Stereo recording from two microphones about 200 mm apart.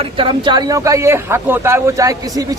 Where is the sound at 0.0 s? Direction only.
25° right (ahead or behind).